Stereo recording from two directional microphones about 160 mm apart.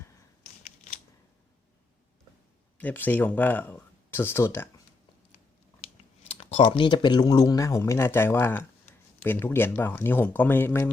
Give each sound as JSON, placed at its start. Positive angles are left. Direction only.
{"t": 2.7, "sound": "speech", "side_deg": 10}
{"t": 5.8, "sound": "speech", "side_deg": 40}